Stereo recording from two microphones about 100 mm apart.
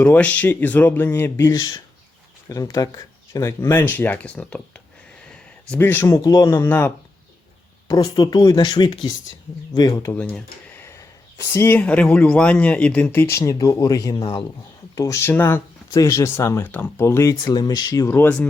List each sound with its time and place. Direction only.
0.0 s speech: 15° left (ahead or behind)
1.5 s speech: 35° left (ahead or behind); by 4.8 s 10° left (ahead or behind)
5.3 s a sound: 10° left (ahead or behind)
5.8 s speech: 20° left (ahead or behind)
6.7 s speech: 20° left (ahead or behind)
7.9 s speech: 40° left (ahead or behind)
10.2 s computer keyboard: 15° left (ahead or behind)
11.5 s speech: 20° left (ahead or behind)
15.2 s speech: 20° left (ahead or behind)
15.9 s speech: 35° left (ahead or behind)
17.4 s speech: 45° left (ahead or behind)
18.1 s speech: 20° left (ahead or behind)